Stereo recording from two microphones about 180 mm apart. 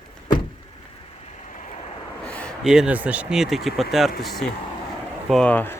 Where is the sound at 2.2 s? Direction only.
5° left (ahead or behind).